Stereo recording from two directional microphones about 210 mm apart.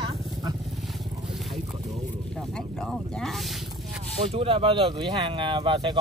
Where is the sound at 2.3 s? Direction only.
Centre (ahead or behind).